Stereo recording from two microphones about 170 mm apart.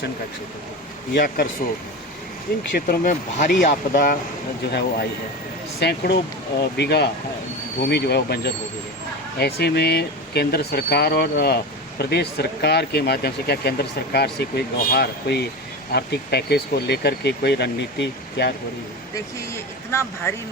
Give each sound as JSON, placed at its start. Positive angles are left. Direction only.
{"t": 1.1, "sound": "speech", "side_deg": 65}
{"t": 2.7, "sound": "speech", "side_deg": 55}
{"t": 4.6, "sound": "speech", "side_deg": 75}
{"t": 19.9, "sound": "speech", "side_deg": 15}